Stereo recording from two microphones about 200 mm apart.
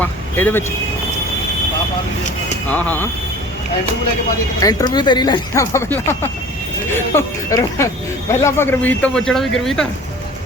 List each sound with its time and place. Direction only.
0.0 s speech: 10° left (ahead or behind)
2.6 s speech: 10° left (ahead or behind)
4.6 s speech: 20° left (ahead or behind); by 9.8 s centre (ahead or behind)